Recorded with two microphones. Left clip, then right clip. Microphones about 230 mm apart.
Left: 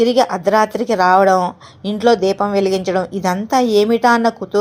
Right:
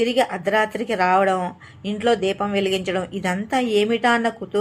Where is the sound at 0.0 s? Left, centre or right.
Left.